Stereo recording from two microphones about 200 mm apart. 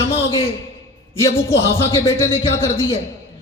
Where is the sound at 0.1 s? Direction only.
30° left (ahead or behind).